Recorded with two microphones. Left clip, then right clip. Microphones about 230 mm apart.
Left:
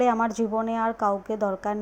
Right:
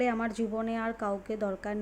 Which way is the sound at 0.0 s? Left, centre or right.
Centre.